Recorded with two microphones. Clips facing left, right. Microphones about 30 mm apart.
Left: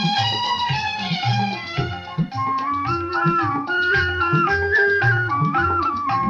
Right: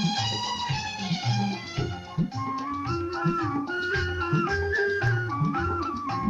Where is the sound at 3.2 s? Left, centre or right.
Left.